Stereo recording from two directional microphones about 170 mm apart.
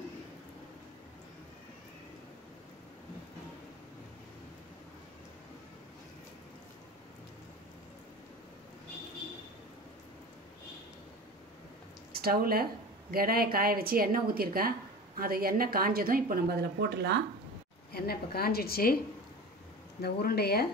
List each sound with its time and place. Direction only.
12.1 s a woman's voice: 65° right (ahead or behind)
17.9 s a woman's voice: 65° left (ahead or behind)
20.0 s speech: 70° left (ahead or behind)